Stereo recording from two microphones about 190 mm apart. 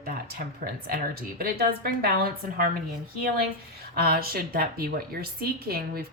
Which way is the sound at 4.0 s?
50° right (ahead or behind).